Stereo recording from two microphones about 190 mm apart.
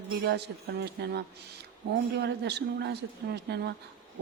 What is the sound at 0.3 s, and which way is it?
A man's voice, 65° right (ahead or behind).